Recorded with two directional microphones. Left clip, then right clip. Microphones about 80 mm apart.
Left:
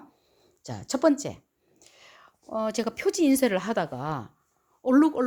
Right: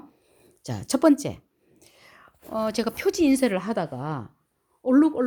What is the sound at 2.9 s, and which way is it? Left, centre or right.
Speech, left.